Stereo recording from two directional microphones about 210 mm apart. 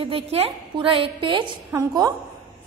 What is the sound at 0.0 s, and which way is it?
A woman's voice, 25° right (ahead or behind).